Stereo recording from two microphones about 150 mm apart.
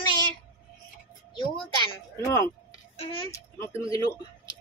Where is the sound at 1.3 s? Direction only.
30° left (ahead or behind).